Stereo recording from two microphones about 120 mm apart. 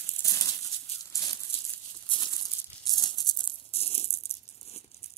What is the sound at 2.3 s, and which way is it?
Maraca, 35° left (ahead or behind).